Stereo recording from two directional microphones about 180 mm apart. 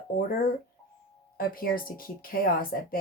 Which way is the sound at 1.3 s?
55° left (ahead or behind).